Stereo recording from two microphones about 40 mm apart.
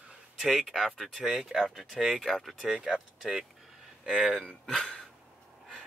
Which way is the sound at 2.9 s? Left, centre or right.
Centre.